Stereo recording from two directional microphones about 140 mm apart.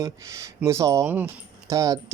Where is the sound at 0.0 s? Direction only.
20° right (ahead or behind).